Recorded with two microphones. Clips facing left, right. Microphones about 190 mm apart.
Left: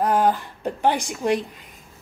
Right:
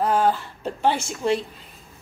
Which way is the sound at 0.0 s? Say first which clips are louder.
Left 1 dB; 15° left (ahead or behind).